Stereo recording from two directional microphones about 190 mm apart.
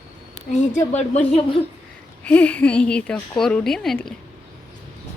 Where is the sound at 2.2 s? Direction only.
10° left (ahead or behind).